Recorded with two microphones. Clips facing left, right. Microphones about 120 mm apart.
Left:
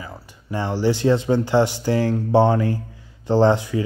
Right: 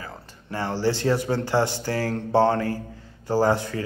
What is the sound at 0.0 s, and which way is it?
A man's voice, 15° left (ahead or behind).